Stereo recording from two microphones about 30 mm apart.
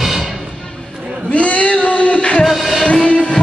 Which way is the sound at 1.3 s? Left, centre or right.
Left.